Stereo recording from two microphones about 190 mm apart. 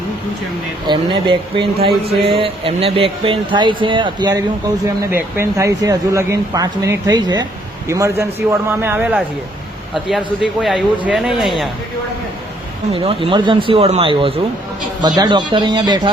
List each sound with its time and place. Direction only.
0.9 s speech: 25° right (ahead or behind); by 11.7 s centre (ahead or behind)
12.9 s speech: 30° right (ahead or behind)